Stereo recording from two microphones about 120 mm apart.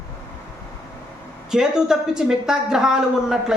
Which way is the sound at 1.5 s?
5° right (ahead or behind).